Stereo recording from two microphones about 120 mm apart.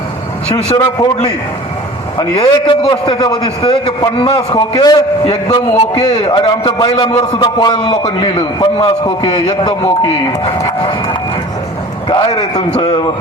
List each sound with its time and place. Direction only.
0.4 s speech: 55° left (ahead or behind)
2.4 s a man's voice: 40° left (ahead or behind)
4.4 s a man's voice: 40° left (ahead or behind)
5.2 s a man's voice: 55° left (ahead or behind)
6.2 s a man's voice: 40° left (ahead or behind)
7.2 s speech: 55° left (ahead or behind)
7.6 s a man's voice: 40° left (ahead or behind)
12.0 s a man's voice: 40° left (ahead or behind)